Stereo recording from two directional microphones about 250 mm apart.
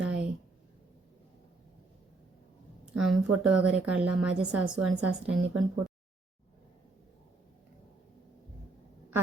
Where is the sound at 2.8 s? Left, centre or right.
Centre.